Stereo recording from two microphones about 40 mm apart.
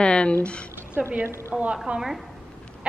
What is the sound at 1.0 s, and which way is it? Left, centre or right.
Speech, right.